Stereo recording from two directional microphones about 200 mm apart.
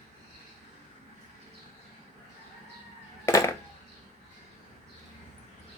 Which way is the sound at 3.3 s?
15° left (ahead or behind).